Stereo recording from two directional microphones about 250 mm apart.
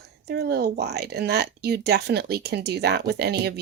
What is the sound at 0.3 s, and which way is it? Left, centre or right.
Speech, right.